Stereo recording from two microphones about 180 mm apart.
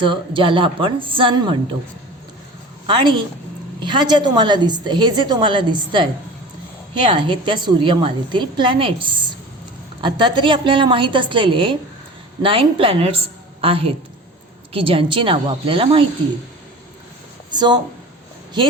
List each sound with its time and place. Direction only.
0.0 s a woman's voice: 30° right (ahead or behind)
2.8 s a woman's voice: 25° right (ahead or behind)
17.5 s speech: 25° right (ahead or behind)